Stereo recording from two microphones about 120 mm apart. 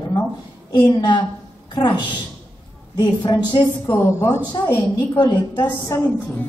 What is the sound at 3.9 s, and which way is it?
A woman's voice, 20° left (ahead or behind).